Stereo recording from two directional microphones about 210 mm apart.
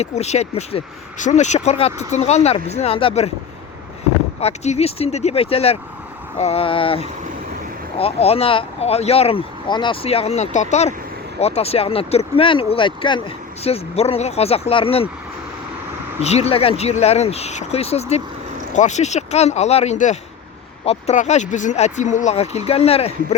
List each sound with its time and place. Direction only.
0.0 s speech: 30° left (ahead or behind)
4.4 s speech: 30° left (ahead or behind)
16.2 s speech: 30° left (ahead or behind)